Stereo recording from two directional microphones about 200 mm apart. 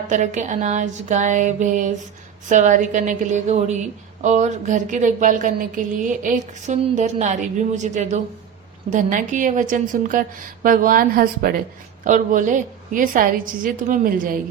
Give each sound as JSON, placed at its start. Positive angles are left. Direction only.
{"t": 0.1, "sound": "a woman's voice", "side_deg": -35}